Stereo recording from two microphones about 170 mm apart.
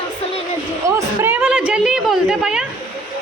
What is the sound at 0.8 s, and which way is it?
A woman's voice, 15° right (ahead or behind).